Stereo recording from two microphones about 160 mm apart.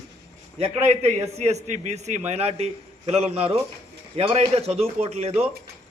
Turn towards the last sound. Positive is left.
turn(degrees=-35)  # may be behind; listen again after turning